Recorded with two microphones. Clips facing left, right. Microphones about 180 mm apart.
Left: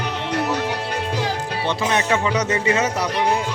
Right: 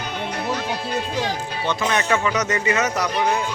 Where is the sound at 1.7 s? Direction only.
25° left (ahead or behind).